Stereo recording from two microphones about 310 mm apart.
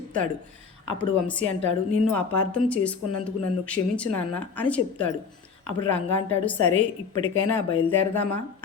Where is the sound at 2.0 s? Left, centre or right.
Centre.